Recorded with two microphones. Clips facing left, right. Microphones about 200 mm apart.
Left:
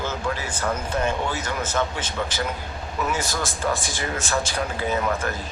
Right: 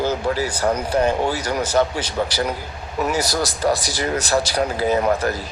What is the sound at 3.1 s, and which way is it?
A man's voice, 40° right (ahead or behind).